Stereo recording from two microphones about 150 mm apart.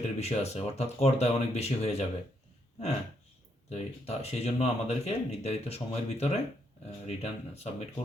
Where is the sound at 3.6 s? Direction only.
45° left (ahead or behind).